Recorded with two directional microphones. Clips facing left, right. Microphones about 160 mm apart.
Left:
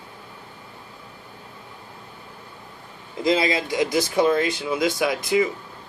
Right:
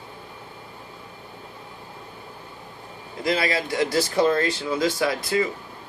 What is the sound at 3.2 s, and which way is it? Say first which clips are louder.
Speech: left 3 dB; 20° left (ahead or behind).